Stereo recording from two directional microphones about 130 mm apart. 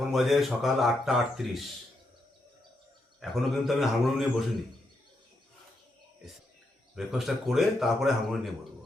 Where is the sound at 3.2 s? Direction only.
Centre (ahead or behind).